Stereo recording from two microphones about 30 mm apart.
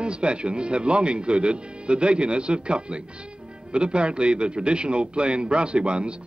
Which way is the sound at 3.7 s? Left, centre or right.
Right.